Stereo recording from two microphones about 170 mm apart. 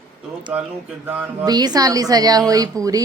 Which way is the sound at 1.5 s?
25° right (ahead or behind).